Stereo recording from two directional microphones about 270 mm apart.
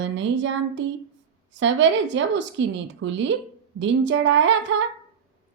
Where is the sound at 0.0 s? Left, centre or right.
Right.